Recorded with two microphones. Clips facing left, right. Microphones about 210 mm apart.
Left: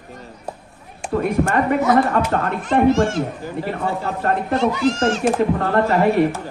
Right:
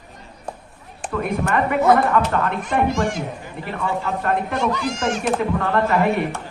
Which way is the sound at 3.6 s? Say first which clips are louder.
Right 1 dB; 40° left (ahead or behind).